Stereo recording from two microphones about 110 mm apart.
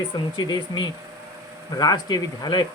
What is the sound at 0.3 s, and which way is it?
Speech, 40° left (ahead or behind).